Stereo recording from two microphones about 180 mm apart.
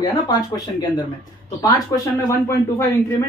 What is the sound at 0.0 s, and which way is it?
Speech, 20° left (ahead or behind).